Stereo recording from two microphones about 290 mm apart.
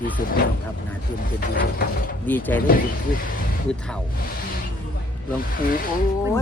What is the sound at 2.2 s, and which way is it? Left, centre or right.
Speech, centre.